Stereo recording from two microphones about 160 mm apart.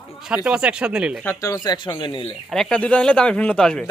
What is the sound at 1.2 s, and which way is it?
Speech, 20° left (ahead or behind).